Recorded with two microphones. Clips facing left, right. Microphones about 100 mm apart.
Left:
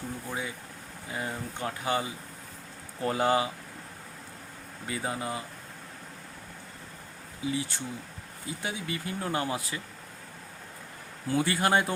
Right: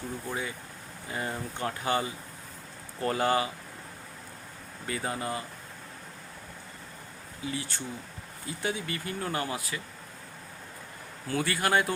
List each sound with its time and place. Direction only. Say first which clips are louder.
0.3 s speech: right 1 dB; 10° left (ahead or behind)
4.9 s speech: even; 10° left (ahead or behind)
7.4 s speech: left 3 dB; 15° left (ahead or behind)
11.3 s speech: left 2 dB; 20° left (ahead or behind)